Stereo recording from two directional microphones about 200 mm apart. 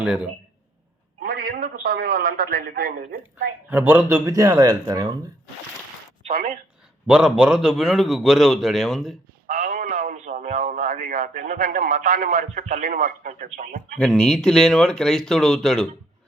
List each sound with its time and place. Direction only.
0.0 s a man's voice: 5° right (ahead or behind)
1.2 s a man's voice: 45° right (ahead or behind)
3.7 s speech: 10° right (ahead or behind)
7.1 s a man's voice: 5° right (ahead or behind)
9.5 s a man's voice: 35° right (ahead or behind)
14.0 s a man's voice: 5° left (ahead or behind)